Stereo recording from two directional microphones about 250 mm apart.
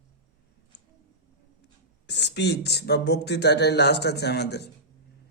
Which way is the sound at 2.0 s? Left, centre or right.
Left.